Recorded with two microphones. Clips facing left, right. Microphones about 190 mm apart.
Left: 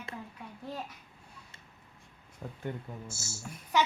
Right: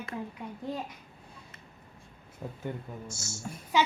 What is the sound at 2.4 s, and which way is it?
Speech, 5° right (ahead or behind).